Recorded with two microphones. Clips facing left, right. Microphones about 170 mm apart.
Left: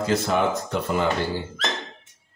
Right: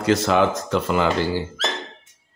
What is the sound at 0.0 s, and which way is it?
Speech, 85° right.